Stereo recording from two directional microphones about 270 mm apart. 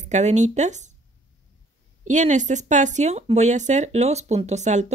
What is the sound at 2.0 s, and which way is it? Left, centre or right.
Speech, right.